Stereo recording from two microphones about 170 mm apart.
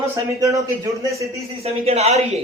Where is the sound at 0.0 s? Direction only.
20° right (ahead or behind).